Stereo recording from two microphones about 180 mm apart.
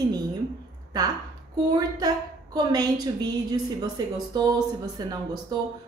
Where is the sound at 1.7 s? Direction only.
20° right (ahead or behind).